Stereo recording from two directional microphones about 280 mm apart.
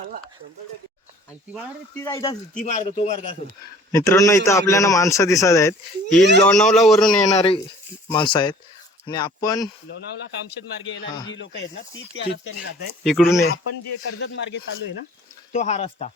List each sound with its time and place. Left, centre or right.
2.0 s a man's voice: centre
3.9 s a man's voice: centre
7.2 s a man's voice: left
11.0 s a man's voice: centre
11.3 s speech: left
13.1 s a man's voice: centre
14.1 s speech: left
15.5 s a man's voice: left